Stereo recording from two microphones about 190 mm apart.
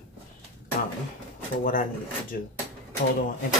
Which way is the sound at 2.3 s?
50° left (ahead or behind).